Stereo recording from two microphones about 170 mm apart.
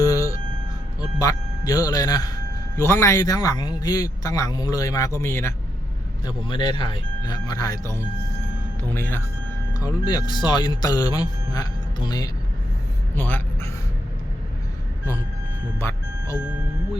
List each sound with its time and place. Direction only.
0.0 s a sound: 20° left (ahead or behind)
1.2 s a man's voice: 20° left (ahead or behind)
6.2 s a man's voice: 25° left (ahead or behind)
13.1 s a sound: 10° left (ahead or behind)
15.8 s music: 15° left (ahead or behind)
16.4 s music: 5° right (ahead or behind)